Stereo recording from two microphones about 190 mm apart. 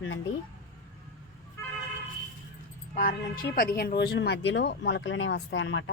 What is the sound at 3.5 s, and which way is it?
Speech, 50° left (ahead or behind).